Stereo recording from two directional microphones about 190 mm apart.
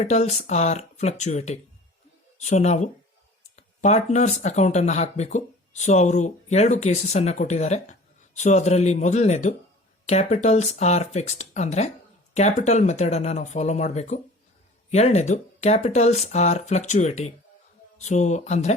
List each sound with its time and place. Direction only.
0.0 s speech: 35° left (ahead or behind)